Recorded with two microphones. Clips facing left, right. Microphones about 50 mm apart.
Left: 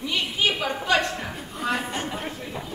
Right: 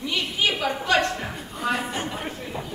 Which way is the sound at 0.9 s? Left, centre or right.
Centre.